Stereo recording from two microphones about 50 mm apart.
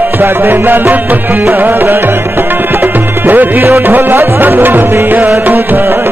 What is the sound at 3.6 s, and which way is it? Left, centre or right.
Music, right.